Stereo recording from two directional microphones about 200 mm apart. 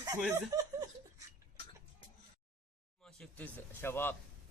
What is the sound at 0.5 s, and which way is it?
Chuckle, 20° right (ahead or behind).